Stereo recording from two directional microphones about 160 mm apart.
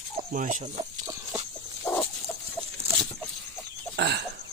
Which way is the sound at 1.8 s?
10° left (ahead or behind).